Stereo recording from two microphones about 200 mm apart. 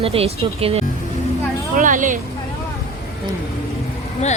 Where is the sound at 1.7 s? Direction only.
40° right (ahead or behind).